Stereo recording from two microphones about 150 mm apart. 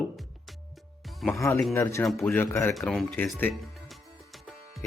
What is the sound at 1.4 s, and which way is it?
Speech, 20° left (ahead or behind).